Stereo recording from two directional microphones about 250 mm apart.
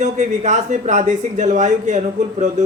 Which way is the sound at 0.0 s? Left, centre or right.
Right.